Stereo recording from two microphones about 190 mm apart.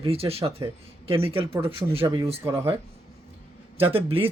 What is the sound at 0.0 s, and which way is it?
Speech, 30° right (ahead or behind).